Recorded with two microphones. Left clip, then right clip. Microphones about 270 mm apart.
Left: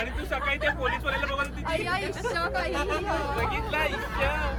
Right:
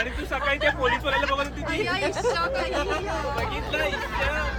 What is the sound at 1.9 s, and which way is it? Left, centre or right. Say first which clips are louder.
Speech: right 4 dB; left.